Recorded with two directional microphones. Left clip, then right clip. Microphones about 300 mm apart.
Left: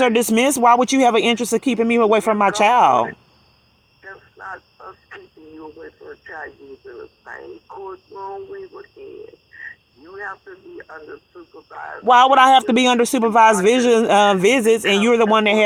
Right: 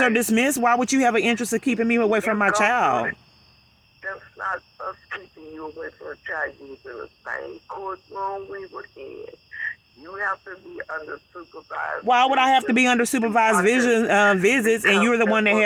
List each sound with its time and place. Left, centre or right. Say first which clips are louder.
0.0 s a man's voice: left 4 dB; centre
4.0 s speech: right 6 dB; right
12.0 s a man's voice: left 7 dB; centre